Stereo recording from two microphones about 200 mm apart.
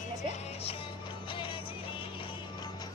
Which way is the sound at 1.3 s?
25° left (ahead or behind).